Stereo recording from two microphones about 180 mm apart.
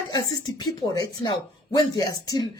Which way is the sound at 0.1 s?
20° left (ahead or behind).